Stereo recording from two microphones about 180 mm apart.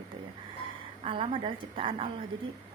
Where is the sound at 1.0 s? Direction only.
30° right (ahead or behind).